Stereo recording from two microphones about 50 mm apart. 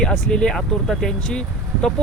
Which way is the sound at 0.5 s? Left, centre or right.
Centre.